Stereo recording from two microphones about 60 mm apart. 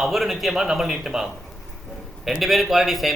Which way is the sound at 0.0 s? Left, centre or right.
Centre.